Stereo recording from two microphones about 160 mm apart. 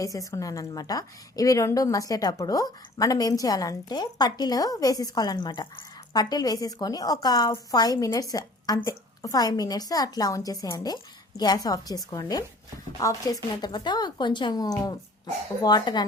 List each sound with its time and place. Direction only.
0.0 s a woman's voice: 20° left (ahead or behind)